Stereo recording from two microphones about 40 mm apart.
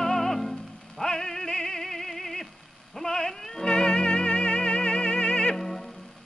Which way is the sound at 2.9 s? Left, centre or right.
Centre.